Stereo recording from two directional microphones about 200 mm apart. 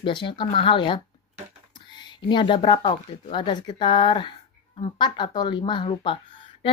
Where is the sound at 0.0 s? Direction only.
25° left (ahead or behind).